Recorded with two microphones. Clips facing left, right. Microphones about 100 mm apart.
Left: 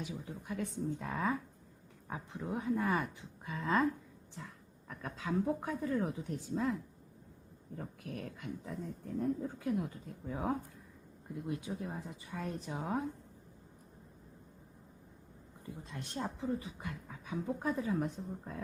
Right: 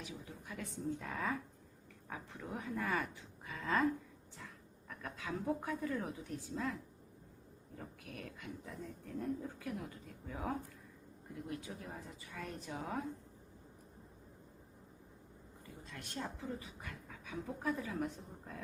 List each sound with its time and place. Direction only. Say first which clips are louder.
0.0 s a woman's voice: left 6 dB; 30° left (ahead or behind)
4.9 s speech: left 5 dB; 30° left (ahead or behind)
7.8 s a woman's voice: left 6 dB; 35° left (ahead or behind)
15.6 s speech: left 6 dB; 25° left (ahead or behind)